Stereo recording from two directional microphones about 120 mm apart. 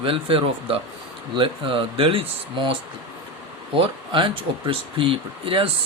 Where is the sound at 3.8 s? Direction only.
45° right (ahead or behind).